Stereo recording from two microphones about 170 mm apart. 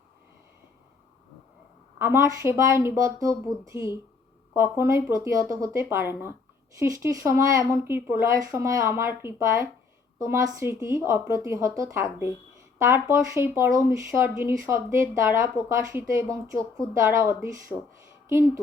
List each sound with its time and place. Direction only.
2.0 s speech: 15° right (ahead or behind)